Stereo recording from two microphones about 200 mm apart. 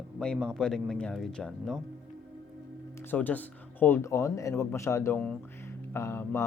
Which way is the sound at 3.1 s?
10° left (ahead or behind).